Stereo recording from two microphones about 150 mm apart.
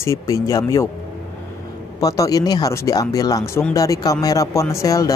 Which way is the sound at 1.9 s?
25° left (ahead or behind).